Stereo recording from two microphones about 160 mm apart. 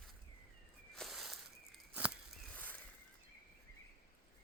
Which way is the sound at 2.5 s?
10° left (ahead or behind).